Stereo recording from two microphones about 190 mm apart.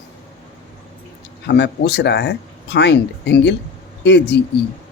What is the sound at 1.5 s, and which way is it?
Speech, 65° left (ahead or behind).